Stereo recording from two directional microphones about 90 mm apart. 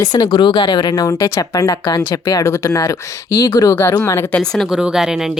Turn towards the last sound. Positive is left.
turn(degrees=-5)  # may be behind; listen again after turning